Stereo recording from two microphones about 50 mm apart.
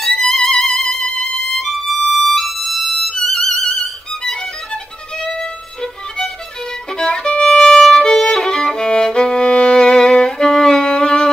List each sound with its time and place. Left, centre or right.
0.2 s music: centre
0.8 s music: centre
1.6 s music: centre
5.1 s violin: centre